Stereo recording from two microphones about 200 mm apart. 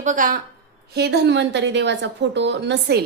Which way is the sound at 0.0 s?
40° right (ahead or behind).